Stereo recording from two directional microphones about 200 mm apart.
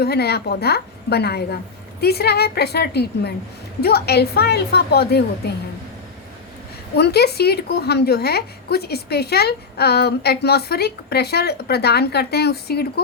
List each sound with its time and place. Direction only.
0.0 s a woman's voice: 55° left (ahead or behind)
6.9 s a woman's voice: 55° left (ahead or behind)